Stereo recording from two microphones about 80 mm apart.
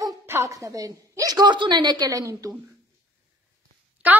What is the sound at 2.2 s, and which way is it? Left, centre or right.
Speech, right.